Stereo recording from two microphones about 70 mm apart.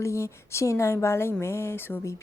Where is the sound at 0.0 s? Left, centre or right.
Left.